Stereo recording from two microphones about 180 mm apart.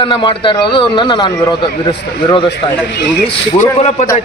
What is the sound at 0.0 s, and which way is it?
A man's voice, 25° left (ahead or behind).